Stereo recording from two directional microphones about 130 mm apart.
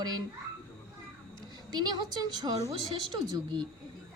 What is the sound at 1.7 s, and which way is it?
A woman's voice, 35° right (ahead or behind).